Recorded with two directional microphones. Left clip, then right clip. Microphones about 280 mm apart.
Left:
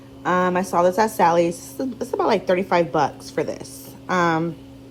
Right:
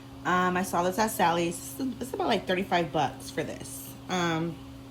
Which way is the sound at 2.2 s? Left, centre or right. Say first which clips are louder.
Left 8 dB; centre.